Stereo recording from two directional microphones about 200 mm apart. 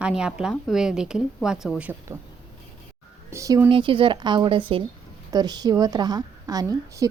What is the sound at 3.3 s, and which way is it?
A woman's voice, 15° right (ahead or behind).